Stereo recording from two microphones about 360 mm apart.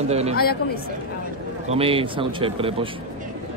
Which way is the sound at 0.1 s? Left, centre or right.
Centre.